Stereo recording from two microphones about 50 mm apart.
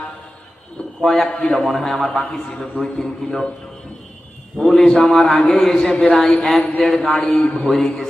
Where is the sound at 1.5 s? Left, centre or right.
Centre.